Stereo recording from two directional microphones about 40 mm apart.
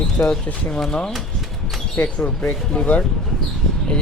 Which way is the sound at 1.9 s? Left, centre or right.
Left.